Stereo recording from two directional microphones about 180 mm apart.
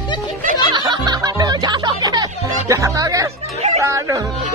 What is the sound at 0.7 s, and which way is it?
Music, 25° right (ahead or behind).